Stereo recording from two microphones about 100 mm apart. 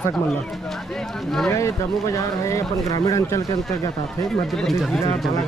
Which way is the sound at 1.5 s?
30° left (ahead or behind).